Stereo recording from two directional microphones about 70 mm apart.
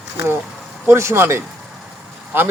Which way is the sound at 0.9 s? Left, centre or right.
Right.